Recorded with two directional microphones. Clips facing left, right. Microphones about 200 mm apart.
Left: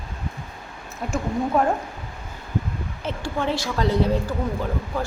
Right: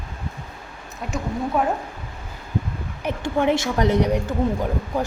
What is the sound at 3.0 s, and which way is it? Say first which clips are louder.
A woman's voice: right 5 dB; 15° right (ahead or behind).